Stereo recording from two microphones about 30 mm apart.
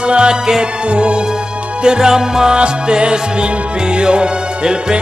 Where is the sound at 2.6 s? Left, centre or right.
Right.